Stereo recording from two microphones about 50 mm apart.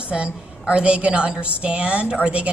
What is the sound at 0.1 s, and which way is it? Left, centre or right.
A woman's voice, right.